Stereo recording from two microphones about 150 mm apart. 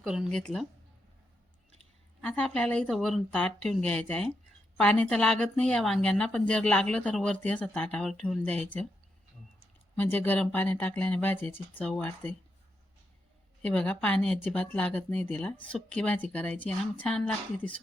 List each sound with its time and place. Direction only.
0.0 s speech: 5° right (ahead or behind)
2.2 s speech: 10° left (ahead or behind)
9.9 s speech: 10° left (ahead or behind)
13.6 s speech: 5° left (ahead or behind)